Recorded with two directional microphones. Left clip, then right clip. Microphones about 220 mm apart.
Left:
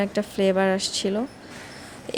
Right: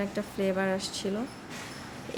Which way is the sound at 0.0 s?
30° left (ahead or behind).